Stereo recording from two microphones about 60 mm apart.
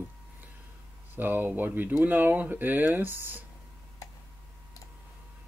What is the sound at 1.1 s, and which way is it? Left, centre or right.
Speech, right.